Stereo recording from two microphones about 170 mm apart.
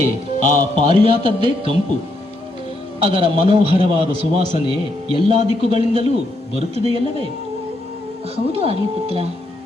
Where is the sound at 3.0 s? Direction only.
35° right (ahead or behind).